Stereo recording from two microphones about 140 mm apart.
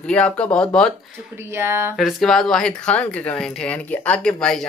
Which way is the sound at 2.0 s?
Centre (ahead or behind).